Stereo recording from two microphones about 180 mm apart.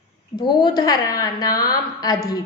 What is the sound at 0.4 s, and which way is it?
A woman's voice, 25° left (ahead or behind).